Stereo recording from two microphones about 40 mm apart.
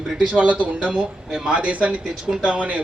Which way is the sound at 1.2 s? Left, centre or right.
Centre.